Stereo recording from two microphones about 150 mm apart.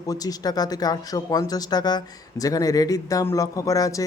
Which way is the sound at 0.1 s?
25° left (ahead or behind).